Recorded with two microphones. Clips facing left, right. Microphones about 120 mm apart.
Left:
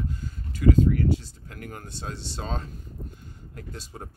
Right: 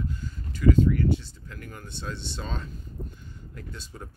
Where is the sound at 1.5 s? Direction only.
55° left (ahead or behind).